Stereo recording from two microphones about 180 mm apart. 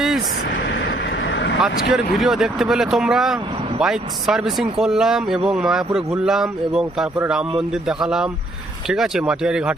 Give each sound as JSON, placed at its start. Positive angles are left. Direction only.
{"t": 0.5, "sound": "vehicle", "side_deg": 70}
{"t": 1.9, "sound": "speech", "side_deg": 0}